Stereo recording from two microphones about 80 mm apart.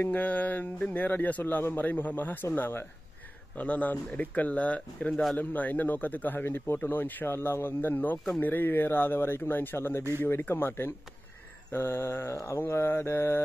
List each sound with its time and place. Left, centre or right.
0.0 s speech: left